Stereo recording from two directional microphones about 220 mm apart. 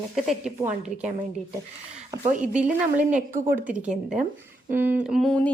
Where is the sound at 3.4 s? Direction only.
10° right (ahead or behind).